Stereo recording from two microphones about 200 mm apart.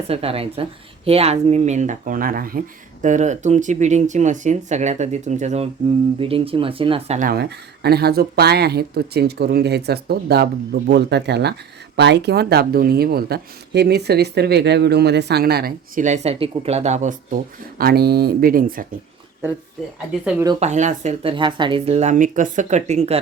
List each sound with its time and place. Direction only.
0.1 s speech: 30° right (ahead or behind)
7.2 s speech: 50° right (ahead or behind)
20.6 s speech: 35° right (ahead or behind)